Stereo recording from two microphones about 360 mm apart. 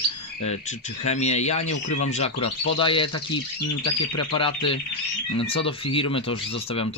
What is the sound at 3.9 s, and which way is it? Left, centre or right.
Speech, left.